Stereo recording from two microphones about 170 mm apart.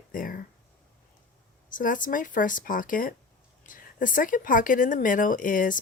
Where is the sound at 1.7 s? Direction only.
50° left (ahead or behind).